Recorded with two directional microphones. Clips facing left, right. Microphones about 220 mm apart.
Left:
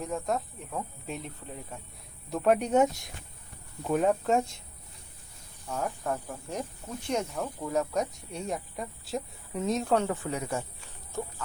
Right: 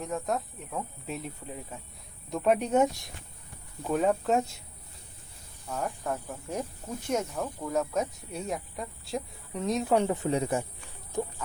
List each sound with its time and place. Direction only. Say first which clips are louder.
0.0 s speech: even; centre (ahead or behind)
5.6 s speech: left 1 dB; centre (ahead or behind)
9.9 s speech: right 2 dB; 20° right (ahead or behind)
11.1 s pig: right 4 dB; 15° right (ahead or behind)